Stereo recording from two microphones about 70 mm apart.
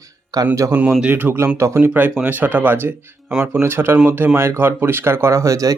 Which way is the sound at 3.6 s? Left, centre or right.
Right.